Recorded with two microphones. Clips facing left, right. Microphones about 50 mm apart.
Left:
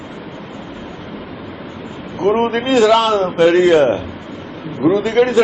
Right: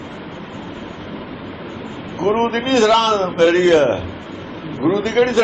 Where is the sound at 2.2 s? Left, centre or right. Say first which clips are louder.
Left 2 dB; centre.